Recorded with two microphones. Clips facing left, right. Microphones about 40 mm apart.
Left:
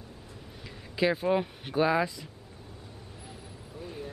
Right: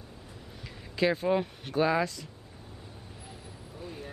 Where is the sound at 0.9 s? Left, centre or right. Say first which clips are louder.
Even; centre.